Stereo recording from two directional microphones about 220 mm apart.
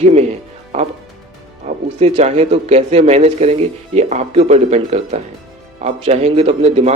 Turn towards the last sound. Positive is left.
turn(degrees=-30)  # may be behind; listen again after turning